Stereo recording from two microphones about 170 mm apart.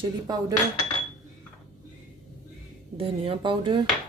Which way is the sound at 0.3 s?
25° right (ahead or behind).